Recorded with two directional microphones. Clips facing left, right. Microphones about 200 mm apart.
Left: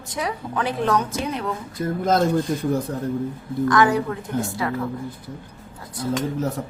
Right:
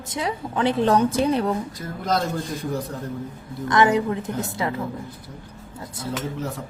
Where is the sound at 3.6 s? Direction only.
20° right (ahead or behind).